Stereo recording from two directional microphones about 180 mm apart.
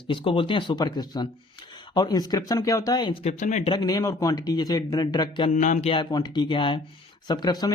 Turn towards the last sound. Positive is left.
turn(degrees=20)  # may be behind; listen again after turning